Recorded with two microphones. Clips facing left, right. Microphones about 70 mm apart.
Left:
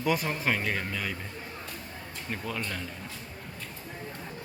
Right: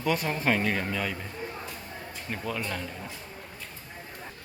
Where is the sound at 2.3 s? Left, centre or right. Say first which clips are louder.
Right 2 dB; centre.